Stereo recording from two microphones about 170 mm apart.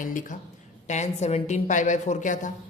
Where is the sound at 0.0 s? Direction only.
50° left (ahead or behind).